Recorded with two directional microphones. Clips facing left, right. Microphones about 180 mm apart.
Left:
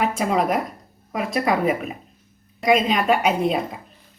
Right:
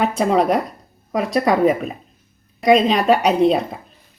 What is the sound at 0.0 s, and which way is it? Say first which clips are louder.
Speech: right 4 dB; 35° right (ahead or behind).